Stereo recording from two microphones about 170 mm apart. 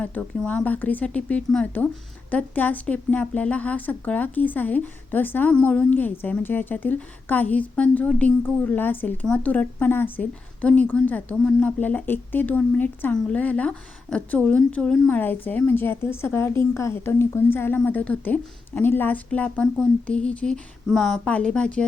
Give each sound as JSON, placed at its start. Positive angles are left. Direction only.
{"t": 0.0, "sound": "speech", "side_deg": 10}